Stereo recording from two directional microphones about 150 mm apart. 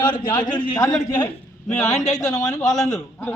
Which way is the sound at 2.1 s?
20° left (ahead or behind).